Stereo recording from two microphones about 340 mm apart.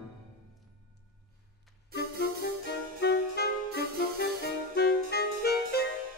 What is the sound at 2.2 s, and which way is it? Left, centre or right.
Music, left.